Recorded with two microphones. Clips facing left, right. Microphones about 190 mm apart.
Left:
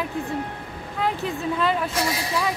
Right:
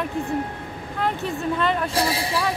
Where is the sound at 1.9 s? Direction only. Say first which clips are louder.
Right 2 dB; 30° right (ahead or behind).